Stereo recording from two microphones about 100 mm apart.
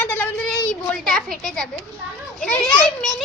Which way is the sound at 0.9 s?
5° left (ahead or behind).